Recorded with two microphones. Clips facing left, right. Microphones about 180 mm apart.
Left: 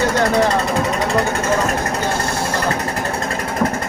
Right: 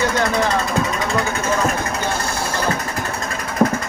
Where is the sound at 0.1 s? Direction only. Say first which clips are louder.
Left 3 dB; 35° left (ahead or behind).